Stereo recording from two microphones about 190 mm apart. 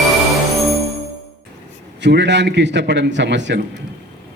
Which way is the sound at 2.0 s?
65° right (ahead or behind).